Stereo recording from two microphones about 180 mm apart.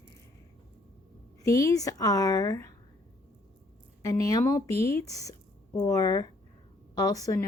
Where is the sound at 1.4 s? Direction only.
15° left (ahead or behind).